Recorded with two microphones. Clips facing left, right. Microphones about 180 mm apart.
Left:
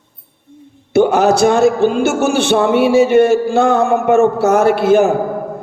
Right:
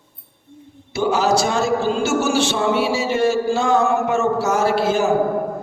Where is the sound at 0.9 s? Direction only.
60° left (ahead or behind).